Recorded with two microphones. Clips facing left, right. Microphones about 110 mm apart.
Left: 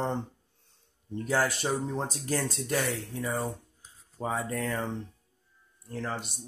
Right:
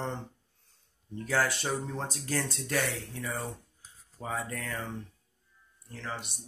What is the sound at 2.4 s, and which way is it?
Speech, 45° left (ahead or behind).